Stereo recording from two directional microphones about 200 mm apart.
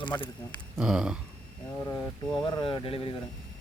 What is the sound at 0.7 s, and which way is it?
Speech, 5° right (ahead or behind).